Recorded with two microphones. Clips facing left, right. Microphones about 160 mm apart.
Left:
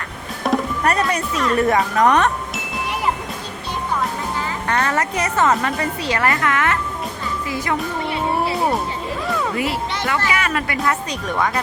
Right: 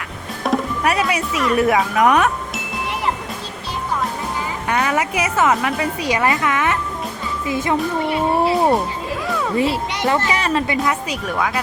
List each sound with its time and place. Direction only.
0.4 s speech: centre (ahead or behind)
4.7 s a woman's voice: 10° right (ahead or behind); by 8.7 s 25° right (ahead or behind)
9.2 s music: centre (ahead or behind)
9.6 s speech: 25° right (ahead or behind)
10.8 s speech: 5° right (ahead or behind)